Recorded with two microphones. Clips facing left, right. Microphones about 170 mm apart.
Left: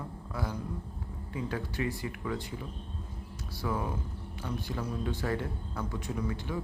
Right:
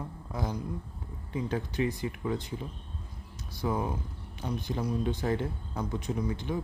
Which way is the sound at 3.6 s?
20° right (ahead or behind).